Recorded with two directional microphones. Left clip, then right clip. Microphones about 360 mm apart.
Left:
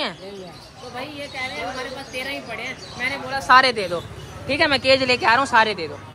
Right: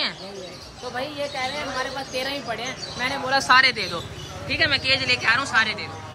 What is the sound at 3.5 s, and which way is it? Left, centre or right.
A man's voice, centre.